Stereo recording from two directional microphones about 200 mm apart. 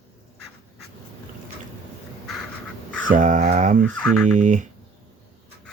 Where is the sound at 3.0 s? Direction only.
40° right (ahead or behind).